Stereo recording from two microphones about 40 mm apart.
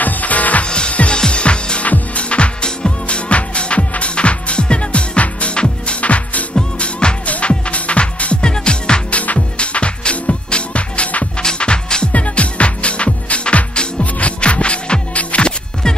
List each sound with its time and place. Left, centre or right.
0.0 s music: left
0.7 s music: left
6.8 s music: left